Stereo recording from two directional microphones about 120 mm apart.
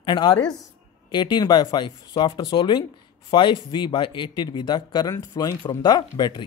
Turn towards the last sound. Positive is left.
turn(degrees=40)  # may be behind; listen again after turning